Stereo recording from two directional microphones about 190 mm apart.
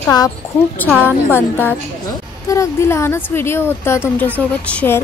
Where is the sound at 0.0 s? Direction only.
20° left (ahead or behind).